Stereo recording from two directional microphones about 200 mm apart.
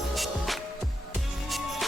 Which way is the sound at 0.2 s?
Centre (ahead or behind).